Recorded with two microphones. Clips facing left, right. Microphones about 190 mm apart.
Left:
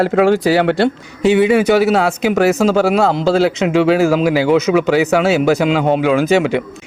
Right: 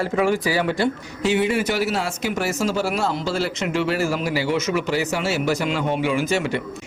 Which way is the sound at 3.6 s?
90° left.